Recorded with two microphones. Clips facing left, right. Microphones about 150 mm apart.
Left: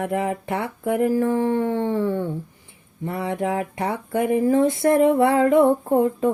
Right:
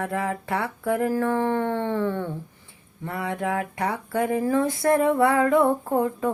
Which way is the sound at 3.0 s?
20° left (ahead or behind).